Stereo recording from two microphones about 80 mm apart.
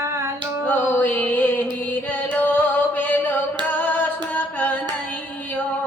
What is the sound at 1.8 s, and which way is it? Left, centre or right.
Music, left.